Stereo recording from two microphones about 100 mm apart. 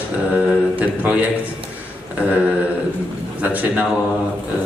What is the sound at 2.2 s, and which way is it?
Mantra, 20° left (ahead or behind).